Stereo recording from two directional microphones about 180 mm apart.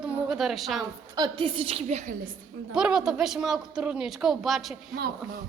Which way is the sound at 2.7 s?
5° right (ahead or behind).